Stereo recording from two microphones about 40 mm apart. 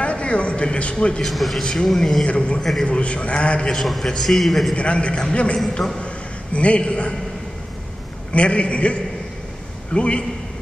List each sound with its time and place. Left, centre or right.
0.0 s a man's voice: left
1.2 s a man's voice: centre
1.6 s speech: centre
1.9 s a man's voice: centre
2.2 s a man's voice: left
3.7 s a man's voice: centre
4.7 s a man's voice: left
8.3 s a man's voice: left